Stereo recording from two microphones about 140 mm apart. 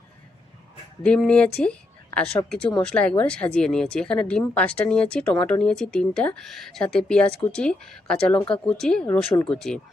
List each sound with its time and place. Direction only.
1.0 s speech: 5° left (ahead or behind)